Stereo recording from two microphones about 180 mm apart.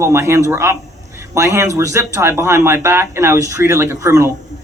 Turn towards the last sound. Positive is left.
turn(degrees=-15)  # may be behind; listen again after turning